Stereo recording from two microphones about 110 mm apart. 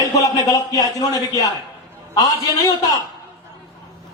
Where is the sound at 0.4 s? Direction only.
35° left (ahead or behind).